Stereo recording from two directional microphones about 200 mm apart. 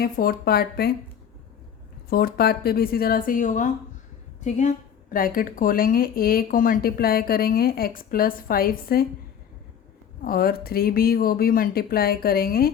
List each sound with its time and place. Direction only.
0.0 s speech: 50° left (ahead or behind)
2.0 s a woman's voice: 50° left (ahead or behind)
5.1 s speech: 45° left (ahead or behind)
10.2 s speech: 50° left (ahead or behind)